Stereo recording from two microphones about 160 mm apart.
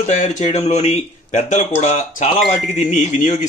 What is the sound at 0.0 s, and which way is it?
Speech, 45° left (ahead or behind).